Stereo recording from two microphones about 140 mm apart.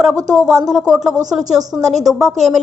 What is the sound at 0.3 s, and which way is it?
A woman's voice, centre (ahead or behind).